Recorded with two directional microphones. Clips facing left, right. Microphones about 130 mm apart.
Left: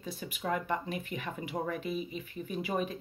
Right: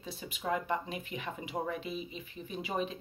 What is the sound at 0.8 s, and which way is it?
Speech, 50° left (ahead or behind).